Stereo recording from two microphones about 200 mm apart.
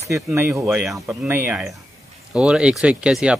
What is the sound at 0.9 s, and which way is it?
Speech, 15° right (ahead or behind).